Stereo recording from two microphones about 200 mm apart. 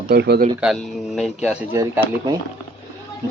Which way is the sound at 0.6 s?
Centre (ahead or behind).